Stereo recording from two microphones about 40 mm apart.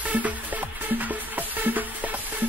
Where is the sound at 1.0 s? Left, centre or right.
Right.